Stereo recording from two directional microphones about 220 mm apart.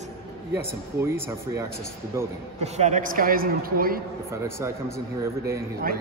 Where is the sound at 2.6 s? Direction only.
30° right (ahead or behind).